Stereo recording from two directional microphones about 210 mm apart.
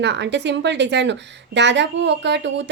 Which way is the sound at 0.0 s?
55° right (ahead or behind).